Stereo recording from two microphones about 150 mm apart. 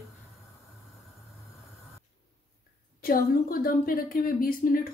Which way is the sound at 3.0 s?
75° left (ahead or behind).